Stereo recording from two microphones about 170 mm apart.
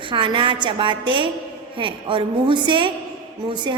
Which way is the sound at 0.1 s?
30° right (ahead or behind).